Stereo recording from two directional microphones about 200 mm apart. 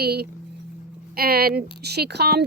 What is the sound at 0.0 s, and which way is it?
A woman's voice, 55° right (ahead or behind).